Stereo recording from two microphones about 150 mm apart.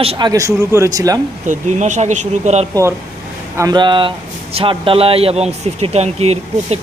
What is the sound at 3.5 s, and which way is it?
Speech, 25° right (ahead or behind).